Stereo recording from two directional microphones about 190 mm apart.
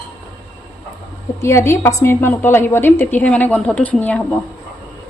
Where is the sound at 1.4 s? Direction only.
15° left (ahead or behind).